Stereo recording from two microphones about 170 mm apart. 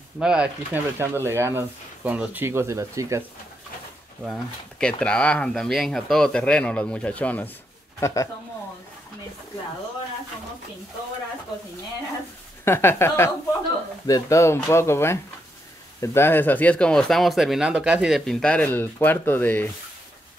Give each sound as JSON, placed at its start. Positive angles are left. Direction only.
{"t": 0.2, "sound": "speech", "side_deg": -5}
{"t": 4.2, "sound": "speech", "side_deg": 5}
{"t": 12.6, "sound": "speech", "side_deg": 15}